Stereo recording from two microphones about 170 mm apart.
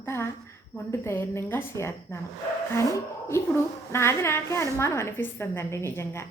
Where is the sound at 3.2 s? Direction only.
15° left (ahead or behind).